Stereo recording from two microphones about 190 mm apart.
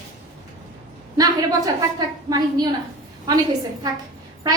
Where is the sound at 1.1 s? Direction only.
20° right (ahead or behind).